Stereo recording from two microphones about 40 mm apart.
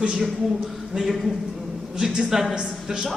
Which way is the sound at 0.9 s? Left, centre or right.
Centre.